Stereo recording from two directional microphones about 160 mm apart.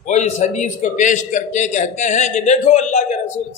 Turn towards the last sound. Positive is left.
turn(degrees=45)  # may be behind; listen again after turning